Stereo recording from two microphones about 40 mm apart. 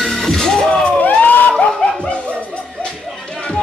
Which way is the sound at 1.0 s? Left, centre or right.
Left.